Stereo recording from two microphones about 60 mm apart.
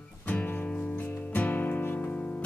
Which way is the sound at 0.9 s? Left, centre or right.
Left.